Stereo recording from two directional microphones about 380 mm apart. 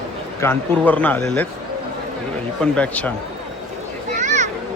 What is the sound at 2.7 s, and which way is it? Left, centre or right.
Speech, centre.